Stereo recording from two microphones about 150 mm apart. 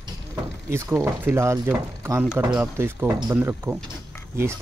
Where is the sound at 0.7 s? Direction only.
20° right (ahead or behind).